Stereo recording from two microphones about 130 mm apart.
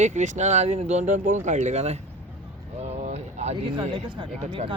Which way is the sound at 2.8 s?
55° right (ahead or behind).